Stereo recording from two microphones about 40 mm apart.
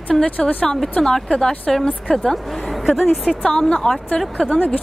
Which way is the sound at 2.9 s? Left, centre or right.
Centre.